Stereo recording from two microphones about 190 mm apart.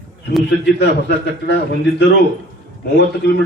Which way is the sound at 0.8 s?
65° left (ahead or behind).